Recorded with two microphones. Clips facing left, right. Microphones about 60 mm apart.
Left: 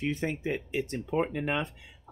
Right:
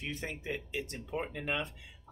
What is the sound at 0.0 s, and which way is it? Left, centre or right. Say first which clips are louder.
Speech: left 9 dB; left.